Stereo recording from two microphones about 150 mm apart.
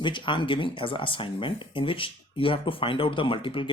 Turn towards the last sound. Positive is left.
turn(degrees=35)  # may be behind; listen again after turning